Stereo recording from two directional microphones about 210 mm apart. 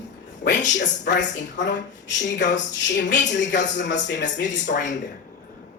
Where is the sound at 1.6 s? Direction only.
35° left (ahead or behind).